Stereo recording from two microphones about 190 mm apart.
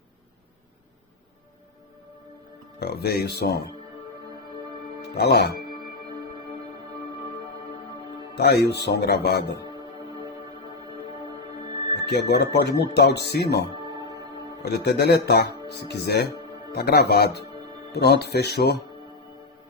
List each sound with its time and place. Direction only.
2.8 s speech: 55° left (ahead or behind)
5.0 s speech: 60° left (ahead or behind)
8.4 s speech: 60° left (ahead or behind)
11.6 s music: 25° right (ahead or behind)
11.9 s speech: 60° left (ahead or behind)
13.9 s music: 20° right (ahead or behind)
14.6 s speech: 60° left (ahead or behind)